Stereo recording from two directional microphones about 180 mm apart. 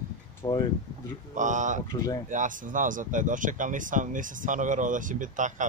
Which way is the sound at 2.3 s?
45° right (ahead or behind).